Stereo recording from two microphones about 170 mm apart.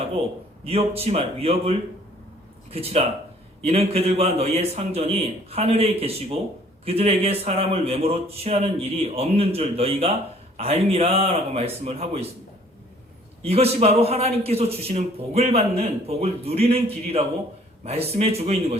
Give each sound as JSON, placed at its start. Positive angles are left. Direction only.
{"t": 0.6, "sound": "a man's voice", "side_deg": -35}
{"t": 13.4, "sound": "a man's voice", "side_deg": -35}